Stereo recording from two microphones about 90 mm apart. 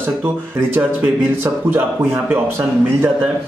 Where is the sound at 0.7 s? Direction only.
20° right (ahead or behind).